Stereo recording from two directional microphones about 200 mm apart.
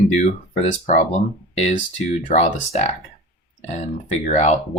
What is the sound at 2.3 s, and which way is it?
Speech, 35° left (ahead or behind).